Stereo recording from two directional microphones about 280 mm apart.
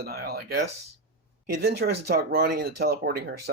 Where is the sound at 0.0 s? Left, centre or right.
Right.